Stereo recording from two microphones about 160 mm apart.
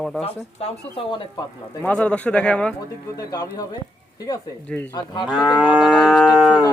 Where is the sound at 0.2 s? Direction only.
40° left (ahead or behind).